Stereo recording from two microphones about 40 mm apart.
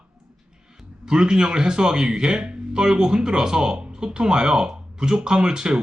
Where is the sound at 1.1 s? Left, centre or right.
Centre.